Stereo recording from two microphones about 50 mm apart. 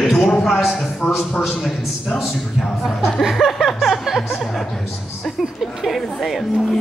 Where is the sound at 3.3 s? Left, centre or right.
Centre.